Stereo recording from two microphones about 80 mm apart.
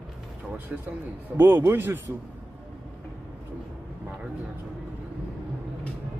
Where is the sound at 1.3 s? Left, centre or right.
Right.